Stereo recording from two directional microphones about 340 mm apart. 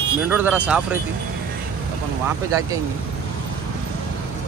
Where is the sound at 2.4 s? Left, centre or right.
Centre.